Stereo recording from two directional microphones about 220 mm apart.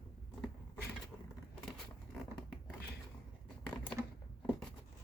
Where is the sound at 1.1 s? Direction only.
10° left (ahead or behind).